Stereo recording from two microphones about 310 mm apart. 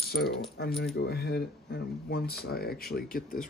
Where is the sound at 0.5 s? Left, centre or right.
Left.